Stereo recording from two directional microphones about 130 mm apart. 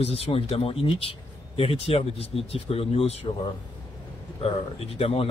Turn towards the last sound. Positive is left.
turn(degrees=50)  # may be behind; listen again after turning